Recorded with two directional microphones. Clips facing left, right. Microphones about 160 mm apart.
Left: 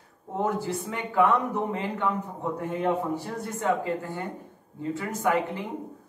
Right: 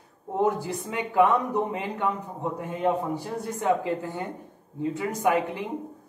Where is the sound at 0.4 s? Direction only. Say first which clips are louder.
Right 2 dB; 15° right (ahead or behind).